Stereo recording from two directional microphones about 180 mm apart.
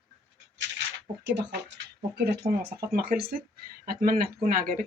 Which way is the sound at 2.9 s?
60° right (ahead or behind).